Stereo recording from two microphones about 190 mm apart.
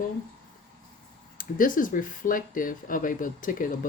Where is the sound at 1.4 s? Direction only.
45° left (ahead or behind).